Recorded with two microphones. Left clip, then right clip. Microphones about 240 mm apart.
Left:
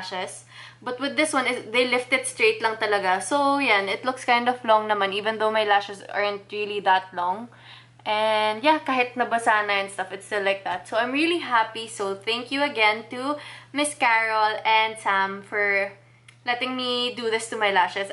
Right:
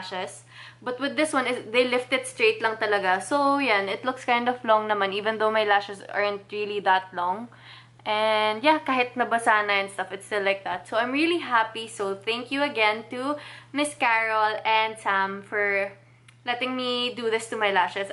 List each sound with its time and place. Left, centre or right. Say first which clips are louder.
0.0 s a woman's voice: left 2 dB; centre